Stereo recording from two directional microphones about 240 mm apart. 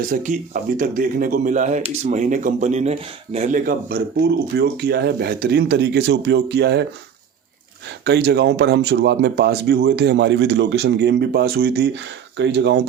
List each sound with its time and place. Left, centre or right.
0.1 s speech: right
8.0 s speech: right